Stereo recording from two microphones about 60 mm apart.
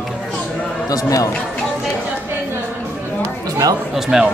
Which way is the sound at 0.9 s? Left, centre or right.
Left.